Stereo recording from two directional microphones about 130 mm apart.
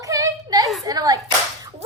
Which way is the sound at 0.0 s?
25° right (ahead or behind).